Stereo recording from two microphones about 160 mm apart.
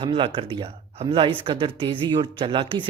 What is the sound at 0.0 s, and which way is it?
Speech, 35° right (ahead or behind).